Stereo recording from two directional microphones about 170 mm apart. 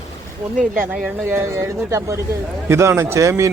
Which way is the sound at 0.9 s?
15° right (ahead or behind).